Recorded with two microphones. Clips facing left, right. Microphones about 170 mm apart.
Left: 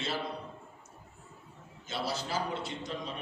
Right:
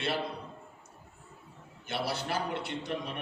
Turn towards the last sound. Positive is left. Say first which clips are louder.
# right 3 dB
turn(degrees=-65)  # may be behind; listen again after turning